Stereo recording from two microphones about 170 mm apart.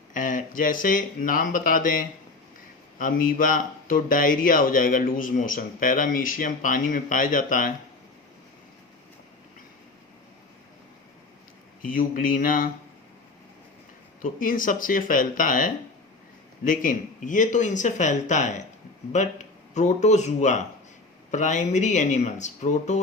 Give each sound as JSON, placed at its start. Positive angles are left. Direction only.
{"t": 0.1, "sound": "speech", "side_deg": 50}
{"t": 11.8, "sound": "speech", "side_deg": 55}
{"t": 14.2, "sound": "speech", "side_deg": 55}
{"t": 19.7, "sound": "speech", "side_deg": 45}